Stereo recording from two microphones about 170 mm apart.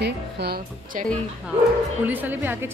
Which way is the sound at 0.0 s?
75° right (ahead or behind).